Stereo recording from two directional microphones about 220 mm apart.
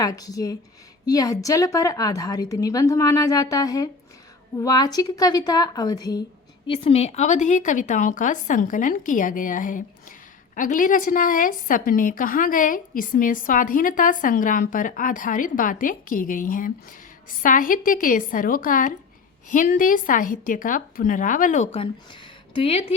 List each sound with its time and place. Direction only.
0.0 s a woman's voice: 15° left (ahead or behind)